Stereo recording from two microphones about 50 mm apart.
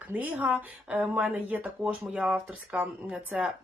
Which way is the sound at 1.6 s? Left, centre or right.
Right.